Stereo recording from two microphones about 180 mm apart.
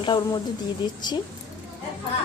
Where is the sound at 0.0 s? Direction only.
25° left (ahead or behind).